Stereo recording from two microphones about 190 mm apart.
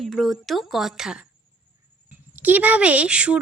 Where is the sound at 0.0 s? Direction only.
Centre (ahead or behind).